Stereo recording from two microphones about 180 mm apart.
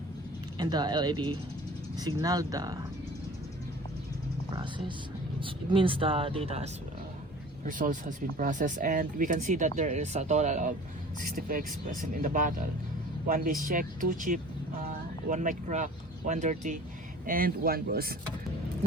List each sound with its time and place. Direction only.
0.6 s speech: 25° right (ahead or behind)
4.5 s speech: 25° right (ahead or behind)
7.6 s speech: 45° right (ahead or behind)